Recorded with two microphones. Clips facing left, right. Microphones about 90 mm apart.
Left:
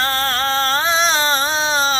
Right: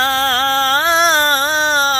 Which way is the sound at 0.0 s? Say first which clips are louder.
Right 4 dB; 90° right.